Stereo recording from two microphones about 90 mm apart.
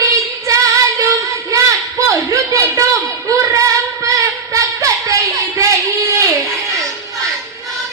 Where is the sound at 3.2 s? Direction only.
35° right (ahead or behind).